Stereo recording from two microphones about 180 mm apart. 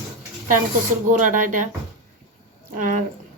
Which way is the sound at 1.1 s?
45° right (ahead or behind).